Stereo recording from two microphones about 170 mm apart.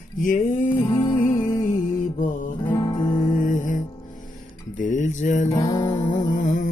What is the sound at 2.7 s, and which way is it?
Guitar, 25° left (ahead or behind).